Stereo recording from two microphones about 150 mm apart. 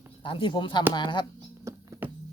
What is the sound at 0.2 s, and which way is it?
Speech, 35° left (ahead or behind).